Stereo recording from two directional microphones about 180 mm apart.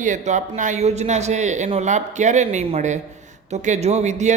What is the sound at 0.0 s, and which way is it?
Speech, 45° right (ahead or behind).